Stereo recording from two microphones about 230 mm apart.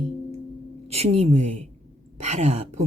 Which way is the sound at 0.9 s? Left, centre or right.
Right.